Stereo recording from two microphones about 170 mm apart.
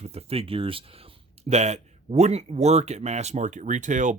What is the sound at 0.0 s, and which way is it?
Speech, 35° right (ahead or behind).